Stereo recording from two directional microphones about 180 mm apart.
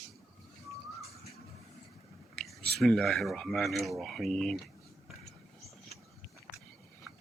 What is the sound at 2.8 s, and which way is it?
Speech, centre (ahead or behind).